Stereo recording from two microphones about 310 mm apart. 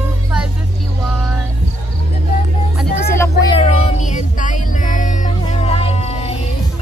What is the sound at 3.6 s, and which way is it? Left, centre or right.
Music, left.